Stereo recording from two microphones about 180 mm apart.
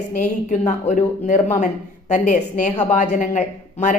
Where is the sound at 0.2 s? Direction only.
40° left (ahead or behind).